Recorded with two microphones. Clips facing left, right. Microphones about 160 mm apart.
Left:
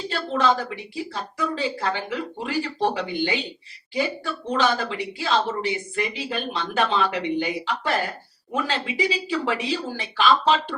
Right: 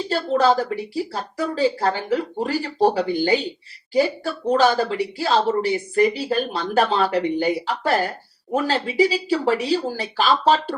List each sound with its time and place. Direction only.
0.1 s speech: 40° right (ahead or behind)